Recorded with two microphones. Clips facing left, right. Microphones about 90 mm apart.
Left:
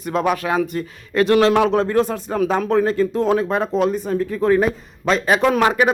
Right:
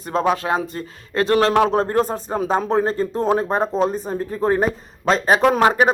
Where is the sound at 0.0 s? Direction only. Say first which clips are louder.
Even; 30° right (ahead or behind).